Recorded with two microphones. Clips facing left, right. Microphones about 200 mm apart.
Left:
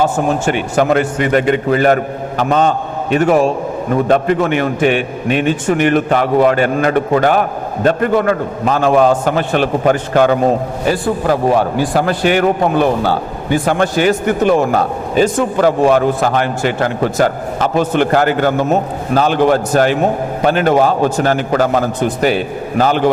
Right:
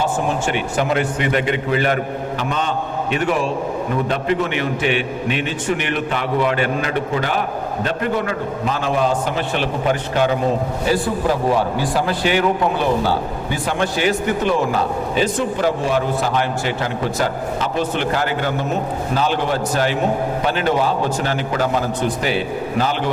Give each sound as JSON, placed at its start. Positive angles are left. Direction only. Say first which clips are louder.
{"t": 0.0, "sound": "a man's voice", "louder": "left 6 dB", "side_deg": 45}